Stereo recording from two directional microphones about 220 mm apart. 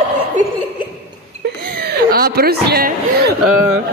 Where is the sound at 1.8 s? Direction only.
45° right (ahead or behind).